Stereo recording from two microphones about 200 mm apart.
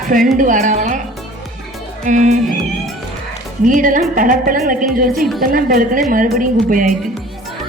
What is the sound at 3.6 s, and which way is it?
A woman's voice, 40° right (ahead or behind).